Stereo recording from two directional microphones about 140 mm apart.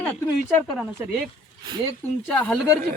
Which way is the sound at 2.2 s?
10° left (ahead or behind).